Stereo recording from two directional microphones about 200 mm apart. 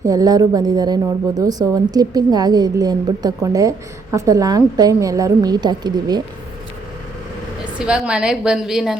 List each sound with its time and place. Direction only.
0.0 s a woman's voice: 15° right (ahead or behind)
7.8 s a woman's voice: 5° right (ahead or behind)